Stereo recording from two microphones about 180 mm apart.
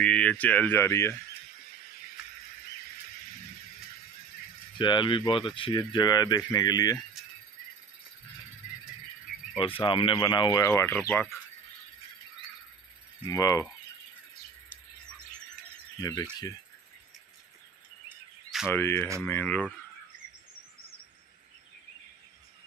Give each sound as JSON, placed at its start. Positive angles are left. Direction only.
{"t": 0.0, "sound": "speech", "side_deg": 5}
{"t": 4.7, "sound": "speech", "side_deg": 25}
{"t": 9.6, "sound": "speech", "side_deg": 30}
{"t": 13.3, "sound": "speech", "side_deg": 20}
{"t": 16.0, "sound": "speech", "side_deg": 20}
{"t": 18.0, "sound": "a sound", "side_deg": -5}
{"t": 18.7, "sound": "speech", "side_deg": 15}